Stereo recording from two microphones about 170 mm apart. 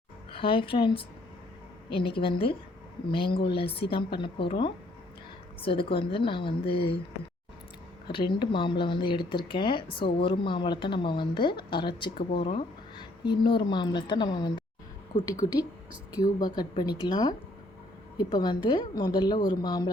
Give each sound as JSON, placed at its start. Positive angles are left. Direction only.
{"t": 0.3, "sound": "a woman's voice", "side_deg": 30}
{"t": 8.1, "sound": "a woman's voice", "side_deg": 30}